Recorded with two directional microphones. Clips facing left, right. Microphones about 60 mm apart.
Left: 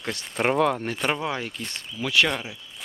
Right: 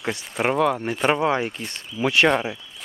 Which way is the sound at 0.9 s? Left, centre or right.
Centre.